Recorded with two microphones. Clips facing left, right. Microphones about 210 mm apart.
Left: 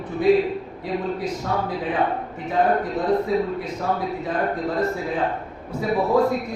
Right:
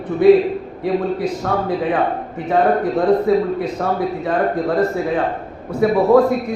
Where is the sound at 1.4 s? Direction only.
60° right (ahead or behind).